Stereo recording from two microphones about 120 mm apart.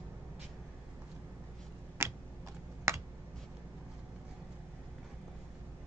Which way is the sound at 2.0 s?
20° right (ahead or behind).